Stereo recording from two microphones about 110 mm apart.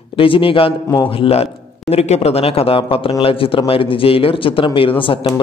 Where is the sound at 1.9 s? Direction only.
75° left (ahead or behind).